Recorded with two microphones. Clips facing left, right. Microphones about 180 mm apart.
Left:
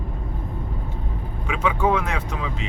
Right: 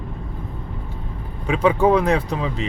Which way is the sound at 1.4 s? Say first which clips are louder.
Right 6 dB; 35° right (ahead or behind).